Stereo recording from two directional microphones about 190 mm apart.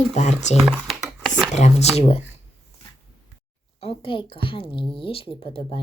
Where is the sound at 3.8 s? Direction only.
30° left (ahead or behind).